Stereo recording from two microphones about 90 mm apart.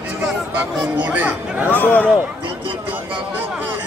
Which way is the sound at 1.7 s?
20° left (ahead or behind).